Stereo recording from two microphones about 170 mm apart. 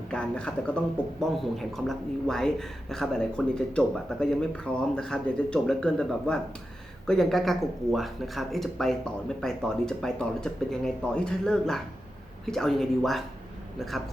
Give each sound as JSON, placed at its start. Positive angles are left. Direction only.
{"t": 0.1, "sound": "speech", "side_deg": 5}